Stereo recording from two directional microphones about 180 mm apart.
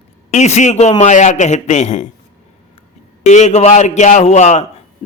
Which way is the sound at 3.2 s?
40° left (ahead or behind).